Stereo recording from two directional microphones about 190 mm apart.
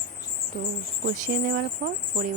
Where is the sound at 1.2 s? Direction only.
45° right (ahead or behind).